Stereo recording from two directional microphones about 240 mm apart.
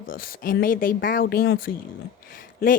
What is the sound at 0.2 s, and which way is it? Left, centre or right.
A woman's voice, left.